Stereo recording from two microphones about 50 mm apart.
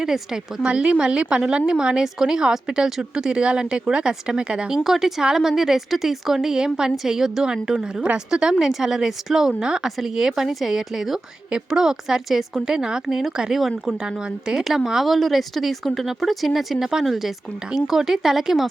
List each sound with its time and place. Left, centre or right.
0.0 s speech: centre
0.7 s a woman's voice: right
4.8 s speech: centre
14.0 s speech: centre
15.0 s speech: centre